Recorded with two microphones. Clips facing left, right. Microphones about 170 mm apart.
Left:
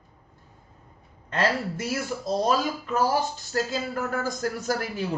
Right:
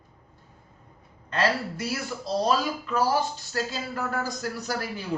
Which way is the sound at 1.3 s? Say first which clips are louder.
Even; 50° left (ahead or behind).